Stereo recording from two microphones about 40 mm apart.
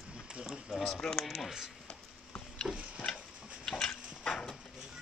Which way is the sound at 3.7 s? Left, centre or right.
Centre.